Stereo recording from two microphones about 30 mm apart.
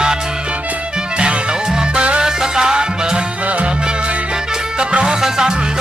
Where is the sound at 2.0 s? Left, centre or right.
Right.